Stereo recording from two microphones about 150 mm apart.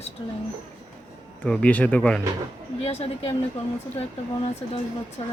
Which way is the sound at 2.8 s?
40° left (ahead or behind).